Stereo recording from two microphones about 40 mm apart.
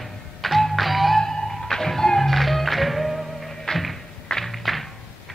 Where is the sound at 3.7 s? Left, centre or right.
Centre.